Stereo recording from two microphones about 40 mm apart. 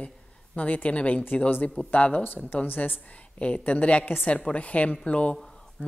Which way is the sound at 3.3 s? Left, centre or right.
Left.